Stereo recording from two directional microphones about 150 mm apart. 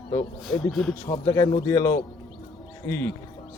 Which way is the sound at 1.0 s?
25° left (ahead or behind).